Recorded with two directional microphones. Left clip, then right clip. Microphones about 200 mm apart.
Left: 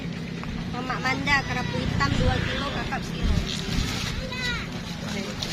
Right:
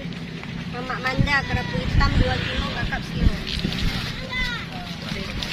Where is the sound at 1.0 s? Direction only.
55° left (ahead or behind).